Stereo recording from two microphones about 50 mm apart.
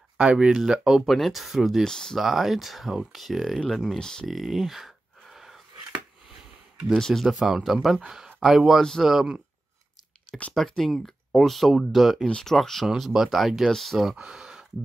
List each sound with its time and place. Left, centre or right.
0.2 s speech: right
0.5 s speech: centre
1.0 s speech: centre
1.9 s speech: centre
2.1 s speech: centre
4.0 s speech: centre
4.3 s a sound: centre
6.9 s speech: centre
7.2 s speech: centre
10.3 s speech: centre
12.3 s speech: centre
12.8 s speech: centre
14.1 s a sound: centre